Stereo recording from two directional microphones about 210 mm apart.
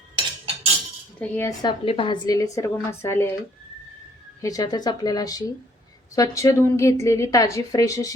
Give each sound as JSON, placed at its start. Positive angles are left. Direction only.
{"t": 0.2, "sound": "cutlery", "side_deg": -30}
{"t": 1.2, "sound": "a woman's voice", "side_deg": 15}
{"t": 4.4, "sound": "a woman's voice", "side_deg": 15}